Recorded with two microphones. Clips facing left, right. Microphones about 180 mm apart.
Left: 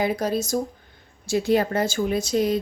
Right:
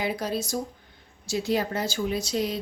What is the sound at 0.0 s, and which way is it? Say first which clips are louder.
Speech: left 5 dB; 45° left (ahead or behind).